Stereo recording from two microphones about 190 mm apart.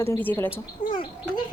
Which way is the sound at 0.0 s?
10° left (ahead or behind).